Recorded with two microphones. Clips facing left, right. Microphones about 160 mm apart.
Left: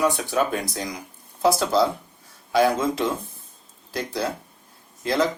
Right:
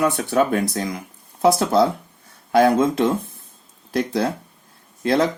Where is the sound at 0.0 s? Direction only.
60° right (ahead or behind).